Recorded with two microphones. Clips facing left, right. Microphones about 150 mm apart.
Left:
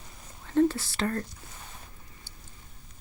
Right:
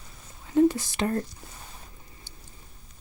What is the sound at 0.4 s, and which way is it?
Whispering, 15° right (ahead or behind).